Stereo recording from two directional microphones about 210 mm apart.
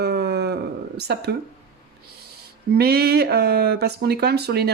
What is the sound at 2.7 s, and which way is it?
Speech, 50° right (ahead or behind).